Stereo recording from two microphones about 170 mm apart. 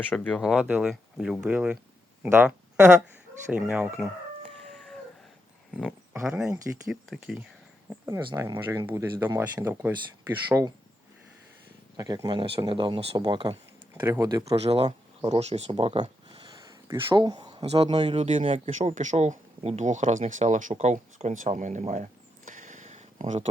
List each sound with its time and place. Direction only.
0.1 s speech: 5° left (ahead or behind)
4.7 s a sound: 5° left (ahead or behind)
6.2 s speech: 5° right (ahead or behind)
8.4 s speech: 20° right (ahead or behind)
11.9 s speech: 25° right (ahead or behind)
13.9 s speech: 15° right (ahead or behind)
14.5 s speech: 35° right (ahead or behind)
18.7 s speech: 45° right (ahead or behind)